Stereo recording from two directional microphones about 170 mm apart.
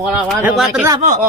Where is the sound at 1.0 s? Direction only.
45° right (ahead or behind).